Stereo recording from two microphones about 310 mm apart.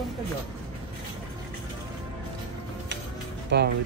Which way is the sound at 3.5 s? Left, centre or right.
Right.